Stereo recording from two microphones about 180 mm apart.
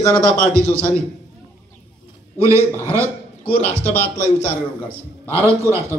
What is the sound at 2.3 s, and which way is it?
Speech, 15° right (ahead or behind).